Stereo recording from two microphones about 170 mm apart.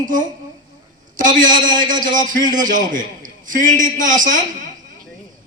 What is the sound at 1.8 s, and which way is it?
A man's voice, 50° right (ahead or behind).